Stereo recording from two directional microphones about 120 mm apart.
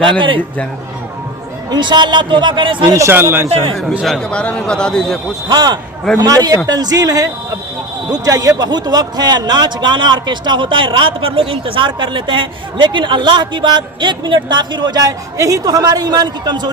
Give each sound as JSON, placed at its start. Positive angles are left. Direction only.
{"t": 1.7, "sound": "speech", "side_deg": -40}
{"t": 2.9, "sound": "speech", "side_deg": -20}
{"t": 4.0, "sound": "a man's voice", "side_deg": 5}
{"t": 5.5, "sound": "speech", "side_deg": -35}